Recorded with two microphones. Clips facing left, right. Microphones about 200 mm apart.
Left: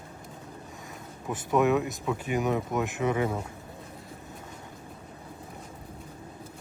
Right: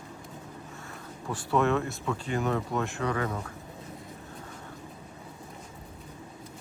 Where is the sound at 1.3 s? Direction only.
15° left (ahead or behind).